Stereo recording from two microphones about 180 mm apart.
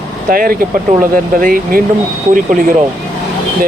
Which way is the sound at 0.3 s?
55° right (ahead or behind).